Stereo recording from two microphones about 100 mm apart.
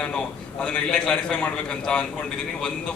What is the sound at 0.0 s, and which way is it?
A man's voice, 10° left (ahead or behind).